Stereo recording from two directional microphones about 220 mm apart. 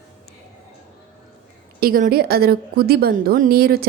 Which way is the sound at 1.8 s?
40° right (ahead or behind).